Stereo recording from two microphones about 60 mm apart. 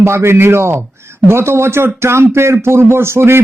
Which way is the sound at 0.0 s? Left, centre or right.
Right.